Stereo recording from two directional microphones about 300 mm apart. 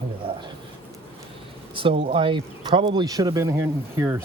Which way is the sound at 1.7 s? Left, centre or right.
Centre.